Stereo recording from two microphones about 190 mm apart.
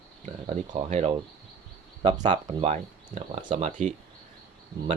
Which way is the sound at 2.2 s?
30° right (ahead or behind).